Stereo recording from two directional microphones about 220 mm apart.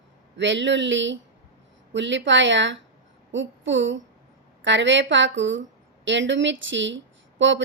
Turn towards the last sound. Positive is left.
turn(degrees=-55)  # may be behind; listen again after turning